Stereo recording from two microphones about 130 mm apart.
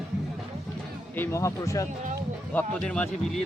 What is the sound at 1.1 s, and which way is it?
Speech, 20° left (ahead or behind).